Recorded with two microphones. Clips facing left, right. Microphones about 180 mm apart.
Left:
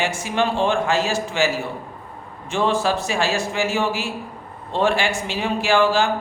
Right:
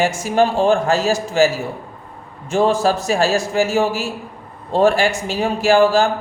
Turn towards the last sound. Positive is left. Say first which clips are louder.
# right 5 dB
turn(degrees=-40)  # may be behind; listen again after turning